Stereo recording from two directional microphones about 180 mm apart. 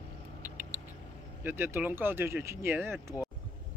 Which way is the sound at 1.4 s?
15° right (ahead or behind).